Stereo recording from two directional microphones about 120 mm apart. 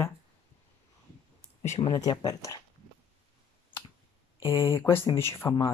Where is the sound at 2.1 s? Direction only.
30° left (ahead or behind).